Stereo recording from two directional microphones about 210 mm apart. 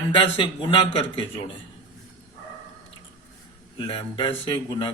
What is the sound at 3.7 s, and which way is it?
Speech, 25° left (ahead or behind).